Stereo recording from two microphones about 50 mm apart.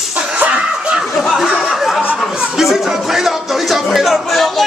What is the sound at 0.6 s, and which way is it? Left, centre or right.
Snicker, centre.